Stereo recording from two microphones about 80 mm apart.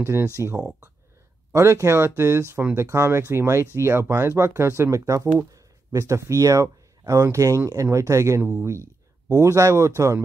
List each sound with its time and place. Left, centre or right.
0.0 s speech: right
8.4 s speech: right